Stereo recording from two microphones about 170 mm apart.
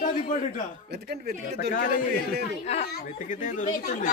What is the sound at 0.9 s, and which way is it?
Speech, 70° right (ahead or behind).